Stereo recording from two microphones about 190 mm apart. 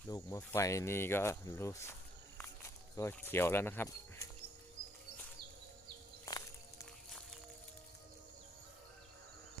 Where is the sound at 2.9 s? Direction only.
15° left (ahead or behind).